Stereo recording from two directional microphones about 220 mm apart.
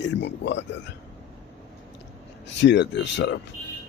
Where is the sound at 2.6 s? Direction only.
50° left (ahead or behind).